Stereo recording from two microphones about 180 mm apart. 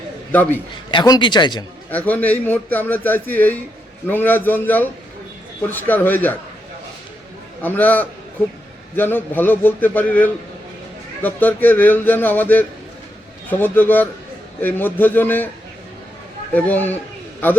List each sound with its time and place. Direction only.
0.3 s a man's voice: 10° left (ahead or behind)
0.9 s speech: 25° left (ahead or behind)
1.9 s a man's voice: 10° left (ahead or behind)
7.6 s a man's voice: 10° left (ahead or behind)
16.6 s a man's voice: 10° left (ahead or behind)